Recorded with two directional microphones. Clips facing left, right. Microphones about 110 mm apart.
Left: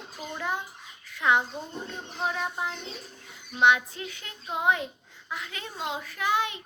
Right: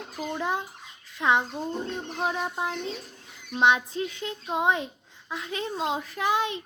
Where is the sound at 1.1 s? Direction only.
25° right (ahead or behind).